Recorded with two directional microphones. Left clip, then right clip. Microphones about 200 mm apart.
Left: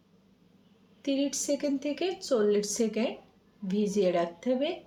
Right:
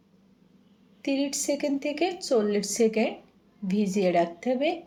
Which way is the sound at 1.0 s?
15° right (ahead or behind).